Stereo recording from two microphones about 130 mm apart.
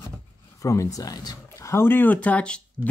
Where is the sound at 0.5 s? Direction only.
25° left (ahead or behind).